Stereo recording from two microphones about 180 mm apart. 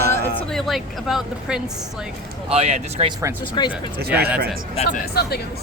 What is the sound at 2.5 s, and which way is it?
Speech, 35° right (ahead or behind).